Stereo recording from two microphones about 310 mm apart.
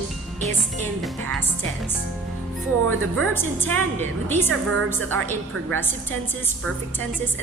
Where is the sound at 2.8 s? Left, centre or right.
Right.